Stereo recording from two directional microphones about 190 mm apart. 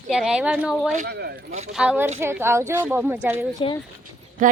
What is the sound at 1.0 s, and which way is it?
Speech, 55° right (ahead or behind).